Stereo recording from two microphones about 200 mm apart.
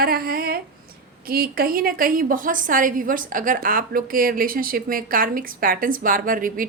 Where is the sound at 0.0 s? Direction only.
50° right (ahead or behind).